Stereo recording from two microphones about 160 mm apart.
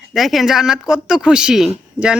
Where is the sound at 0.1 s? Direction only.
Centre (ahead or behind).